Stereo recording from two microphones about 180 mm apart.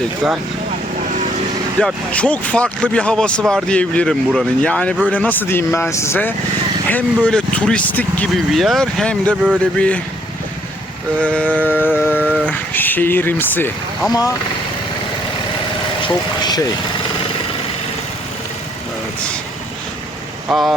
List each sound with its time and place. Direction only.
0.9 s vehicle: 45° right (ahead or behind)
1.8 s speech: 5° left (ahead or behind)
9.3 s speech: 5° right (ahead or behind)
9.7 s speech: 5° left (ahead or behind)
11.2 s speech: 5° left (ahead or behind)
11.9 s humming: 10° left (ahead or behind)
12.2 s a sound: 10° right (ahead or behind)
12.5 s speech: 10° left (ahead or behind)
16.0 s speech: 25° left (ahead or behind)
20.5 s speech: centre (ahead or behind)